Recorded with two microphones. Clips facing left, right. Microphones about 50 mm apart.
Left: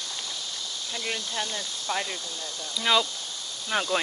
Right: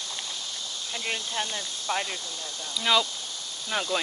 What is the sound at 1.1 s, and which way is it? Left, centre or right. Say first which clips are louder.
Speech: right 1 dB; centre.